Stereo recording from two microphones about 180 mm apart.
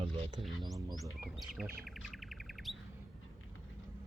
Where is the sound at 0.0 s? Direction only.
25° right (ahead or behind).